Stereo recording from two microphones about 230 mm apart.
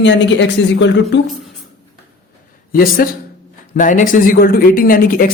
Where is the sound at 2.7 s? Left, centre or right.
Left.